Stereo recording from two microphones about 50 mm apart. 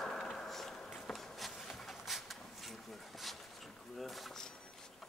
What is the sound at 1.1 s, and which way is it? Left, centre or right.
Walk, centre.